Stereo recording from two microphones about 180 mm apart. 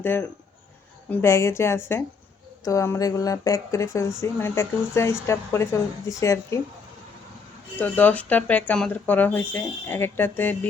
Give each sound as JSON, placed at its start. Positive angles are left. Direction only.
{"t": 0.0, "sound": "speech", "side_deg": 10}
{"t": 7.8, "sound": "speech", "side_deg": 10}